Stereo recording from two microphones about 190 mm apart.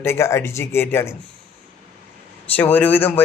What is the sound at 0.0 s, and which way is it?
A man's voice, 15° left (ahead or behind).